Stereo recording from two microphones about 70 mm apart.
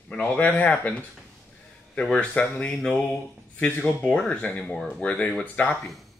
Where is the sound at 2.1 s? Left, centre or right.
Centre.